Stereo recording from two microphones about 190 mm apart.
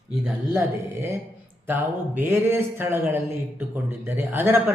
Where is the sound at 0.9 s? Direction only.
15° right (ahead or behind).